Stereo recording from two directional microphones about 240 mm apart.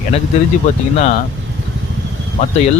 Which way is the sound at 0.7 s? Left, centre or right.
Left.